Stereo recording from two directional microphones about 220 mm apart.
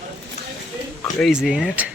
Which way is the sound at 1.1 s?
Centre (ahead or behind).